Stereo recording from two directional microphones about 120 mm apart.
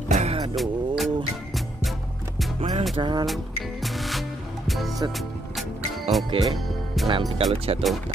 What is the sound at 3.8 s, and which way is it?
Music, centre (ahead or behind).